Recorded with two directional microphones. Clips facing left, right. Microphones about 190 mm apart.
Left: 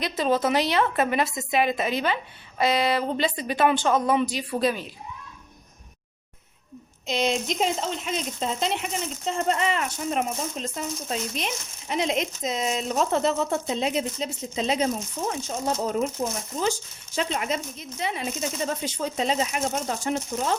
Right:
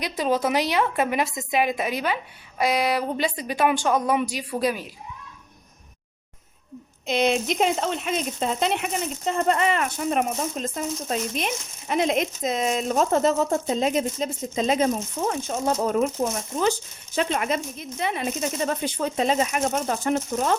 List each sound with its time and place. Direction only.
0.0 s a woman's voice: 10° right (ahead or behind)
7.1 s speech: 60° right (ahead or behind)